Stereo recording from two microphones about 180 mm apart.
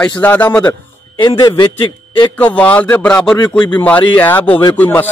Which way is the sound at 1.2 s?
20° left (ahead or behind).